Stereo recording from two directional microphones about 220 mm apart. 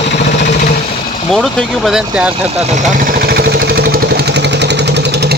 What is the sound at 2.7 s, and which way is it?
Vehicle, 35° right (ahead or behind).